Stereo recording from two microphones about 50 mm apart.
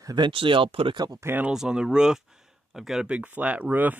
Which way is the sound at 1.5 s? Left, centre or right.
Centre.